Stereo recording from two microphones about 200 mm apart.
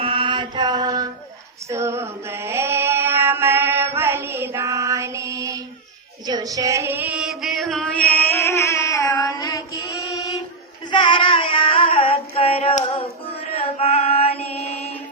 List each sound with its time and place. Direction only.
0.0 s mantra: 25° right (ahead or behind)
1.7 s female singing: 15° right (ahead or behind)
6.2 s a sound: 20° right (ahead or behind); by 8.8 s 15° left (ahead or behind)
9.0 s child singing: 10° left (ahead or behind)
9.2 s mantra: 20° left (ahead or behind)
10.9 s female singing: 25° left (ahead or behind)